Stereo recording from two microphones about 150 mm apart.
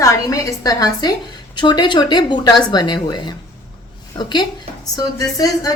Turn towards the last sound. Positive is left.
turn(degrees=25)  # may be behind; listen again after turning